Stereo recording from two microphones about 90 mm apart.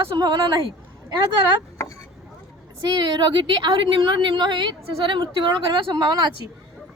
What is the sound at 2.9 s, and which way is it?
A woman's voice, 55° right (ahead or behind).